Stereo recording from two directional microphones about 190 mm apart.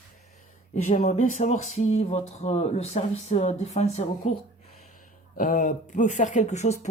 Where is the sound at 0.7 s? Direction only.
40° left (ahead or behind).